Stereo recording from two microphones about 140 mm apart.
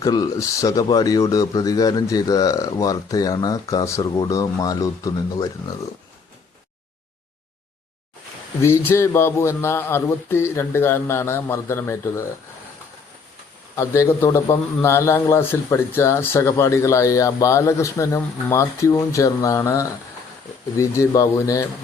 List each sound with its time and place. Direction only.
0.0 s a man's voice: 30° left (ahead or behind)
8.6 s a man's voice: 15° left (ahead or behind)
13.7 s a man's voice: 20° left (ahead or behind)